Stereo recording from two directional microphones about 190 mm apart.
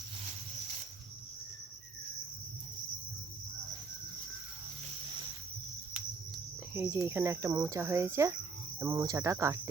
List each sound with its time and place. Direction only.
6.7 s speech: 10° right (ahead or behind)